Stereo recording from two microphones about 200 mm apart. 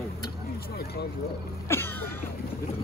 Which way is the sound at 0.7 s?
50° left (ahead or behind).